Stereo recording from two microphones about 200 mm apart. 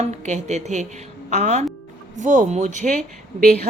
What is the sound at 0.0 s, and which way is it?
Speech, 35° right (ahead or behind).